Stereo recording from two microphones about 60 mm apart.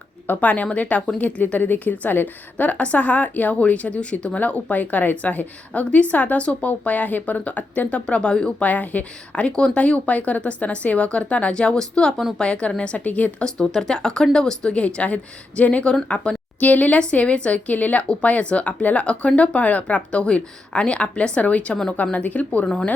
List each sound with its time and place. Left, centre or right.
0.3 s a woman's voice: left
8.6 s a woman's voice: left
13.7 s speech: centre
16.0 s a sound: centre
16.6 s a woman's voice: left
22.6 s speech: centre